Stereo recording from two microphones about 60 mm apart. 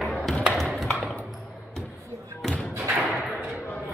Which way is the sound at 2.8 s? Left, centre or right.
Right.